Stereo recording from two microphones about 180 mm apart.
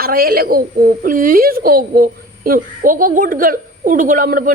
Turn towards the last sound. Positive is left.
turn(degrees=-50)  # may be behind; listen again after turning